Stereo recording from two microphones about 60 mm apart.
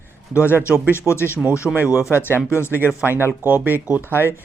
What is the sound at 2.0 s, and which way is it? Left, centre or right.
Speech, left.